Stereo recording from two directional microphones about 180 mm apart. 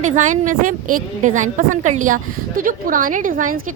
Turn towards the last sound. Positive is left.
turn(degrees=-50)  # may be behind; listen again after turning